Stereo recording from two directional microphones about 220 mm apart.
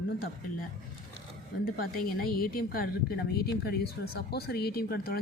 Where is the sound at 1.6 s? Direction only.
40° left (ahead or behind).